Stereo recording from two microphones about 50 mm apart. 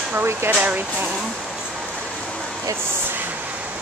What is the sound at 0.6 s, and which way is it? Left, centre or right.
Speech, right.